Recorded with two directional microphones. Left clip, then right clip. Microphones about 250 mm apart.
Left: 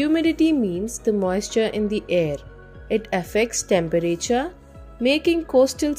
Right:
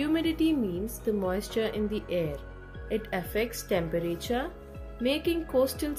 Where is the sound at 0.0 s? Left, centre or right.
Left.